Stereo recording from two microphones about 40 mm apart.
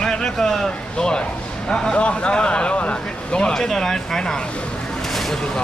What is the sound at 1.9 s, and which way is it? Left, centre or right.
Speech, left.